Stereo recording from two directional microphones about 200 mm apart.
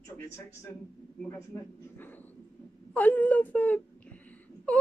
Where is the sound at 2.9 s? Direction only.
10° left (ahead or behind).